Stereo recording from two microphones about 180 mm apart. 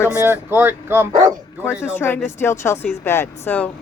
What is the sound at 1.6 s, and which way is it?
Speech, 10° left (ahead or behind).